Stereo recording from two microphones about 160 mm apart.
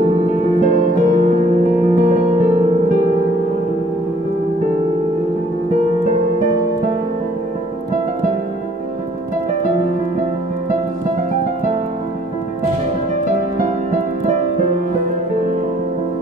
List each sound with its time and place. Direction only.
0.0 s music: 50° right (ahead or behind)
13.6 s music: 45° right (ahead or behind)